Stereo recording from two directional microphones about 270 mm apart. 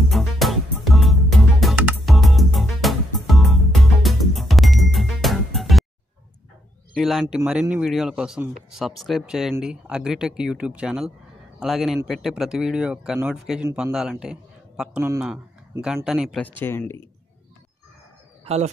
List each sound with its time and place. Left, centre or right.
0.1 s music: centre
7.0 s speech: centre
18.4 s bird: right